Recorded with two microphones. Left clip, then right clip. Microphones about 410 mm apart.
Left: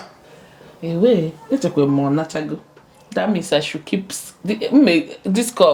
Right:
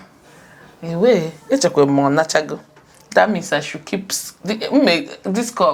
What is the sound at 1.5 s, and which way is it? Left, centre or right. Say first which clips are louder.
Speech: right 4 dB; right.